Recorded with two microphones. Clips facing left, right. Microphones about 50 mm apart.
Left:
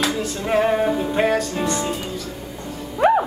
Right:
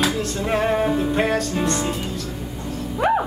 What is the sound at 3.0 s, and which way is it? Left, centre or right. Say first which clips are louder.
Music: left 3 dB; centre.